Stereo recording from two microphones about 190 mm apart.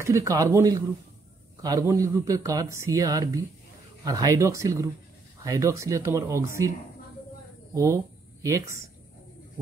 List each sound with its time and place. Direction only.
0.0 s speech: 15° right (ahead or behind)
7.7 s speech: 15° right (ahead or behind)